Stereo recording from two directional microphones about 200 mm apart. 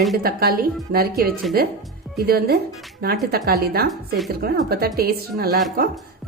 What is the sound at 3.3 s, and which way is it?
A woman's voice, 50° right (ahead or behind).